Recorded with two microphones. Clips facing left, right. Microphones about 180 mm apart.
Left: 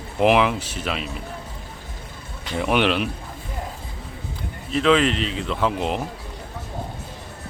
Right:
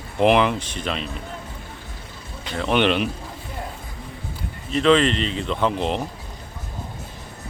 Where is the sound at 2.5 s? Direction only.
10° left (ahead or behind).